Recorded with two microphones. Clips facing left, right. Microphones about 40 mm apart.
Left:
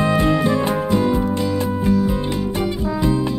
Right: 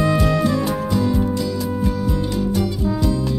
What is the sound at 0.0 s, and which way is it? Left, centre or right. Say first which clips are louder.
Music: left 1 dB; left.